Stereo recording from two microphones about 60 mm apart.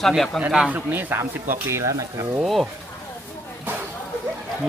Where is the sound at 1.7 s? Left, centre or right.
Right.